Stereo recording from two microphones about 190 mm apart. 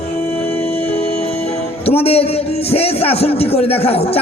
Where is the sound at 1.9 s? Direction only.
30° left (ahead or behind).